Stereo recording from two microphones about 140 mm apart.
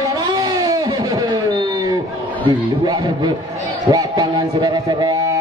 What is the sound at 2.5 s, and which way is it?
A man's voice, 30° right (ahead or behind).